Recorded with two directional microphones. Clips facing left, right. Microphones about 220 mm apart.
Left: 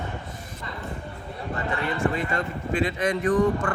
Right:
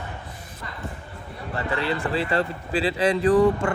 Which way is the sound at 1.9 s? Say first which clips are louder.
Right 1 dB; 35° right (ahead or behind).